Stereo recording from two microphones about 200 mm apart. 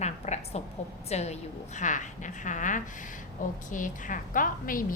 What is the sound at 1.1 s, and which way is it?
A woman's voice, 35° left (ahead or behind).